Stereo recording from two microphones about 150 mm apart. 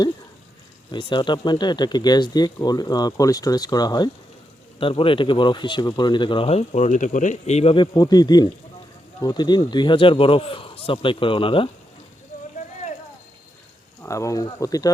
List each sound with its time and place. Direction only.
0.9 s speech: 30° left (ahead or behind)
7.9 s speech: 25° left (ahead or behind)
14.0 s speech: 20° left (ahead or behind)